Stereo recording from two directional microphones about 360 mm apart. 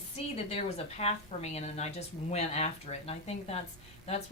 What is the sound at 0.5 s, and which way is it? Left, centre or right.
Speech, centre.